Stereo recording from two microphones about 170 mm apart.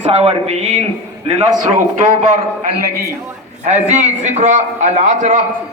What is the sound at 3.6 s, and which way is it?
A man's voice, 40° right (ahead or behind).